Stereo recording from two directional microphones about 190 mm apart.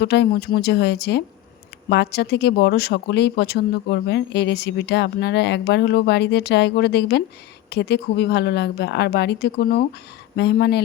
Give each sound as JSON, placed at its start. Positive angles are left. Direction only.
{"t": 0.0, "sound": "speech", "side_deg": 60}